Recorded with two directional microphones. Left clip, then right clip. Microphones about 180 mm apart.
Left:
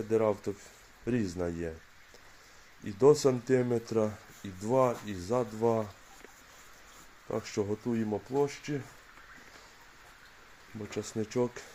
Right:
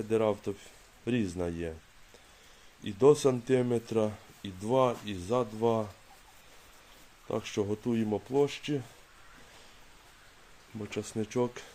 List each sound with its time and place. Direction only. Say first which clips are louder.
0.1 s speech: even; 5° right (ahead or behind)
2.8 s speech: even; 5° right (ahead or behind)
7.3 s speech: right 1 dB; 10° right (ahead or behind)
7.9 s speech: right 3 dB; 20° right (ahead or behind)
10.8 s speech: even; 5° right (ahead or behind)